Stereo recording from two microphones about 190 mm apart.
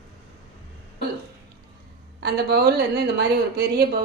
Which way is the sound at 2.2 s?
60° right (ahead or behind).